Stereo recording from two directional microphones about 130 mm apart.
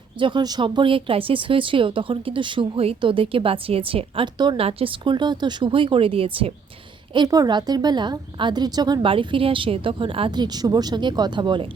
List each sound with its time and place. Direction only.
0.2 s a woman's voice: 35° right (ahead or behind)
7.1 s a woman's voice: 30° right (ahead or behind)